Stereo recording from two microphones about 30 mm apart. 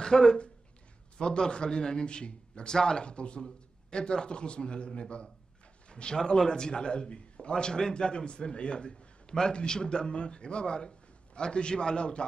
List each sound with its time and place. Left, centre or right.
0.0 s a man's voice: left
2.7 s a man's voice: left
5.9 s a sound: left
6.1 s a man's voice: centre